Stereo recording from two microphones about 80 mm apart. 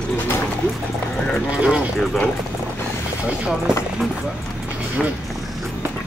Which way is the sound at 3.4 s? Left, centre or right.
Centre.